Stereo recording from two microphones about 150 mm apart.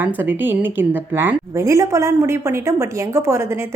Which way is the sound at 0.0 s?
15° right (ahead or behind).